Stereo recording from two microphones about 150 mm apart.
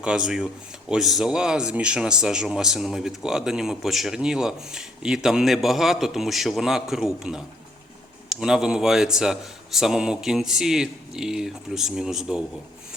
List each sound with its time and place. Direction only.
0.0 s speech: 5° right (ahead or behind)